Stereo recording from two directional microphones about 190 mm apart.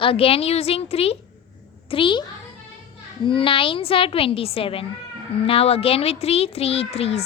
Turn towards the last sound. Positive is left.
turn(degrees=30)  # may be behind; listen again after turning